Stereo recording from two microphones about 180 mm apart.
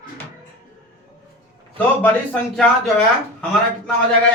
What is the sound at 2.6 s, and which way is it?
Speech, 5° left (ahead or behind).